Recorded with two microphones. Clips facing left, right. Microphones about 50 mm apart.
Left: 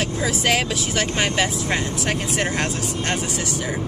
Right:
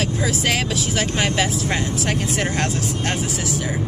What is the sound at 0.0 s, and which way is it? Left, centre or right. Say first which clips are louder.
Speech: even; centre.